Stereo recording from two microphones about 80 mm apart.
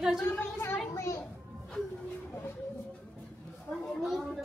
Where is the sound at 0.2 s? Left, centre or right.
Left.